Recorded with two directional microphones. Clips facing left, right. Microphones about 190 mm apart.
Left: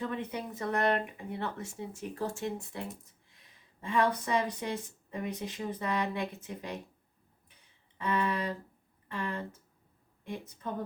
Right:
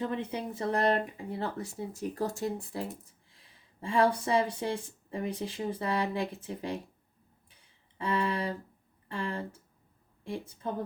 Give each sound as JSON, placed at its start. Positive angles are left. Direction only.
{"t": 0.0, "sound": "speech", "side_deg": -25}
{"t": 7.9, "sound": "speech", "side_deg": -30}